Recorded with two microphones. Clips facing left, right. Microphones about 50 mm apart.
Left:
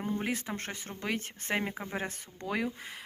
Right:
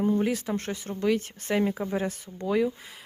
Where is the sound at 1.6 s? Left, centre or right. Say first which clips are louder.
Right 8 dB; left.